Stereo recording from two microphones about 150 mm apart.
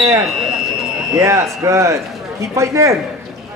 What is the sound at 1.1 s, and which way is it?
Speech, 20° right (ahead or behind).